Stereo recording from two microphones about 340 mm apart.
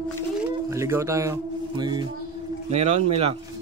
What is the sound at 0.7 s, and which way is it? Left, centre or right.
Speech, centre.